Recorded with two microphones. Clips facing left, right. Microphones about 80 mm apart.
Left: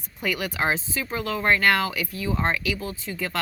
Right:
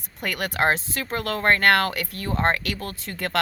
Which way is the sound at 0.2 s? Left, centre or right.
Right.